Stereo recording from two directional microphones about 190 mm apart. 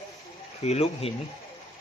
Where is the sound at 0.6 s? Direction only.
35° left (ahead or behind).